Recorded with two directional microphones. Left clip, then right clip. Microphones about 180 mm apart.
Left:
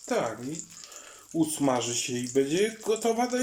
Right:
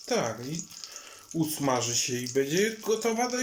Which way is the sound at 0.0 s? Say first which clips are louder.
Even; centre (ahead or behind).